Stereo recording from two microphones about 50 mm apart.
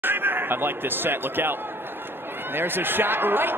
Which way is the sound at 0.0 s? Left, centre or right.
Right.